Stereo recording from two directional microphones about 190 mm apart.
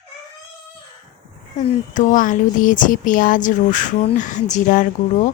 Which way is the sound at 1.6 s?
35° left (ahead or behind).